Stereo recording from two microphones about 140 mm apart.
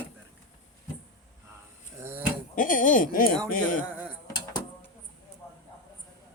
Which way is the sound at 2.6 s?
75° left (ahead or behind).